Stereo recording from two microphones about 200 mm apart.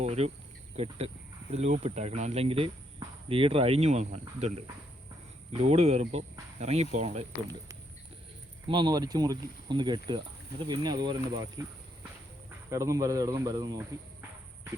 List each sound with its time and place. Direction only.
0.0 s speech: 30° right (ahead or behind)
8.6 s speech: 25° right (ahead or behind)
12.7 s speech: 15° right (ahead or behind)